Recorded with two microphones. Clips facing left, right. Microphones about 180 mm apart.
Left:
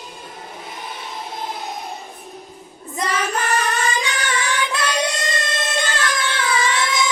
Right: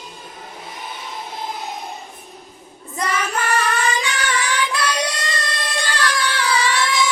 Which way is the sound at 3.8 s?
20° left (ahead or behind).